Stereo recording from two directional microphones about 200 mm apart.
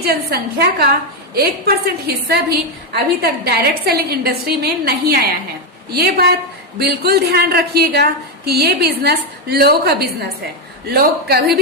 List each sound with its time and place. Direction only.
0.0 s a woman's voice: 50° right (ahead or behind)